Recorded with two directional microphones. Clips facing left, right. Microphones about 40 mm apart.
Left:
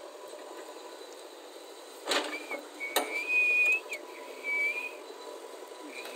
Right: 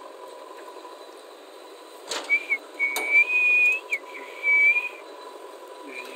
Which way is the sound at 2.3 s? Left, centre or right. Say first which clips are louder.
Right 12 dB; right.